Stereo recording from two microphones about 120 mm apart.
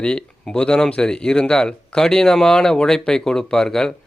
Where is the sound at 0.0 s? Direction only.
10° left (ahead or behind).